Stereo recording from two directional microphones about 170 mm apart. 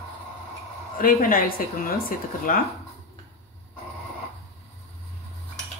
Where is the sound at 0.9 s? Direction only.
60° left (ahead or behind).